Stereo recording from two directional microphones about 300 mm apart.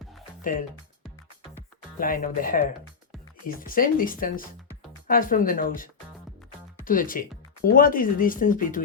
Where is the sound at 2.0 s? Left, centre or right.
Left.